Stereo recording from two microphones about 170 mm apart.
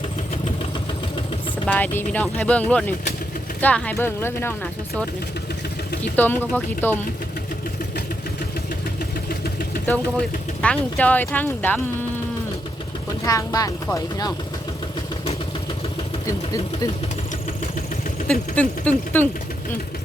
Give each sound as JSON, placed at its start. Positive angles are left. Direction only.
{"t": 1.6, "sound": "speech", "side_deg": 10}
{"t": 6.1, "sound": "speech", "side_deg": 10}
{"t": 9.8, "sound": "speech", "side_deg": 10}
{"t": 13.2, "sound": "speech", "side_deg": 20}
{"t": 16.2, "sound": "speech", "side_deg": 20}
{"t": 18.3, "sound": "speech", "side_deg": 10}